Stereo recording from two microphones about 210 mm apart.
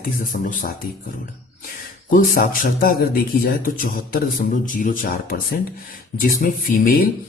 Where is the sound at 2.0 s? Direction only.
40° left (ahead or behind).